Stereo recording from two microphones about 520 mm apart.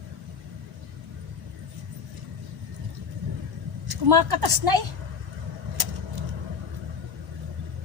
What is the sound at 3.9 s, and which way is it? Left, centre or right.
Speech, right.